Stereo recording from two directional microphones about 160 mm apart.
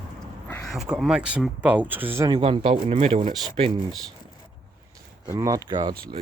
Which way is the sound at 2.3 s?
35° right (ahead or behind).